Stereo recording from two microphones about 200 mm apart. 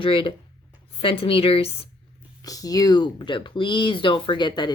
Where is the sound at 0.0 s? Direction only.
25° left (ahead or behind).